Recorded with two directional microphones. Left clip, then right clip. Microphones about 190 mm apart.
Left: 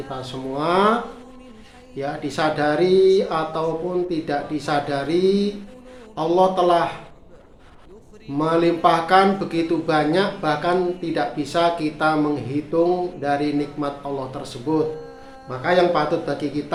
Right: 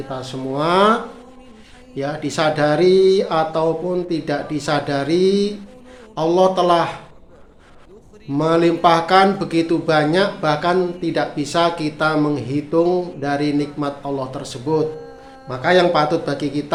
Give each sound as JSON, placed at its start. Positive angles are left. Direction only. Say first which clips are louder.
{"t": 0.1, "sound": "speech", "louder": "right 4 dB", "side_deg": -35}
{"t": 2.0, "sound": "speech", "louder": "right 3 dB", "side_deg": -40}
{"t": 8.3, "sound": "a man's voice", "louder": "right 3 dB", "side_deg": -40}